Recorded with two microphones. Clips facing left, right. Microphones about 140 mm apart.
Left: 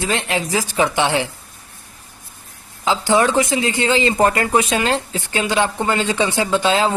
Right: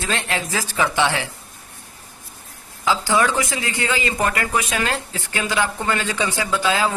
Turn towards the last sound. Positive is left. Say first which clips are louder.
# left 4 dB
turn(degrees=25)  # may be behind; listen again after turning